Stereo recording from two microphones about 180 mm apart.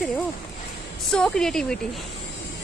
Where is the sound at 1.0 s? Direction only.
5° left (ahead or behind).